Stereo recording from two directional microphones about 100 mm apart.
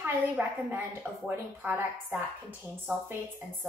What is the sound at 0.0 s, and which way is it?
A woman's voice, 20° right (ahead or behind).